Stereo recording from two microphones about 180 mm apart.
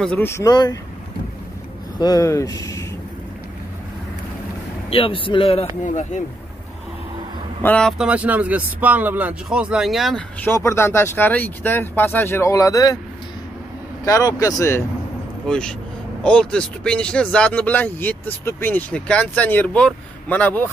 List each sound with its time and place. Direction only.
0.0 s speech: 10° left (ahead or behind)
2.0 s speech: 20° left (ahead or behind)
4.8 s a man's voice: 30° left (ahead or behind)
7.6 s speech: 5° left (ahead or behind)
8.0 s speech: 10° right (ahead or behind); by 12.9 s 20° left (ahead or behind)
14.0 s a man's voice: 20° left (ahead or behind)
15.4 s speech: 5° left (ahead or behind)